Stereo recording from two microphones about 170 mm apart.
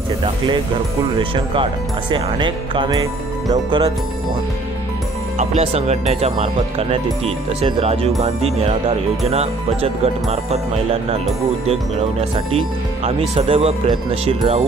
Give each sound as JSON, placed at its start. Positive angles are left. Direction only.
{"t": 1.1, "sound": "speech", "side_deg": -30}
{"t": 5.4, "sound": "speech", "side_deg": -40}